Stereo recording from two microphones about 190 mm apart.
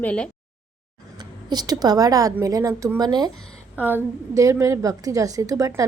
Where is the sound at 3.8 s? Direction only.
10° right (ahead or behind).